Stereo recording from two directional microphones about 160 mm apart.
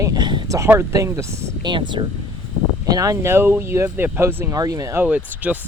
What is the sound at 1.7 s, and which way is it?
Speech, 30° right (ahead or behind).